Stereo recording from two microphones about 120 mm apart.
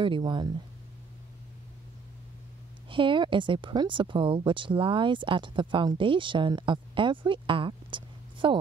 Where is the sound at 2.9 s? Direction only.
45° right (ahead or behind).